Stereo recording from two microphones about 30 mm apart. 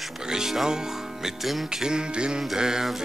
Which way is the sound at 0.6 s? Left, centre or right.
Right.